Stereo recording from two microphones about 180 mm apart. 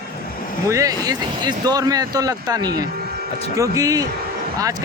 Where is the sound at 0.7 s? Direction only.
20° right (ahead or behind).